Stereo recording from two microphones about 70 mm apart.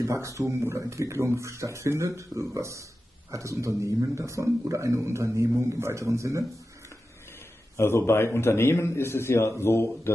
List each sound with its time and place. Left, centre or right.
0.0 s speech: right
7.7 s a man's voice: left